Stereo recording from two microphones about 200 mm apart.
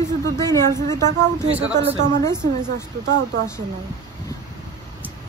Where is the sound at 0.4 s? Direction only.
15° left (ahead or behind).